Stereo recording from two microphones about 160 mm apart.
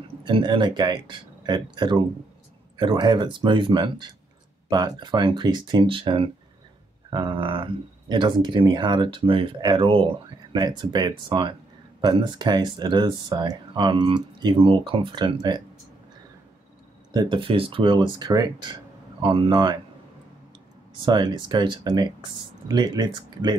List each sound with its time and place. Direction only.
0.2 s speech: 30° right (ahead or behind)
17.1 s speech: 30° right (ahead or behind)
21.0 s speech: 30° right (ahead or behind)